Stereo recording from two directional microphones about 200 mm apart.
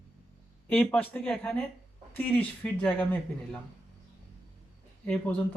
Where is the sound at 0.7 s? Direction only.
5° left (ahead or behind).